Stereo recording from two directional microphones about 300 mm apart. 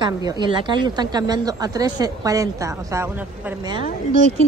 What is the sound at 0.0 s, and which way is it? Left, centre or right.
Speech, centre.